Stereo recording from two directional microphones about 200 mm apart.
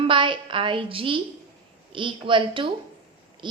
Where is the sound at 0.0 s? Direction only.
25° right (ahead or behind).